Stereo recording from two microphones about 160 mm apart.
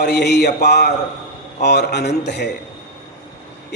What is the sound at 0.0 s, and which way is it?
A man's voice, 90° left.